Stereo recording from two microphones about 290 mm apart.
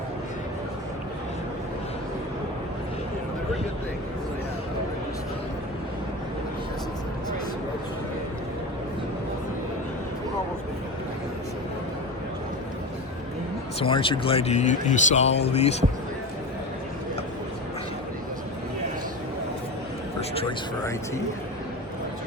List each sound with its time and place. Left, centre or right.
13.8 s speech: centre
20.3 s speech: centre